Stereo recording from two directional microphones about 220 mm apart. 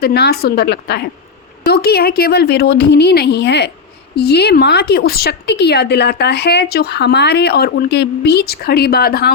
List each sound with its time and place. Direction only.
0.0 s speech: 45° left (ahead or behind)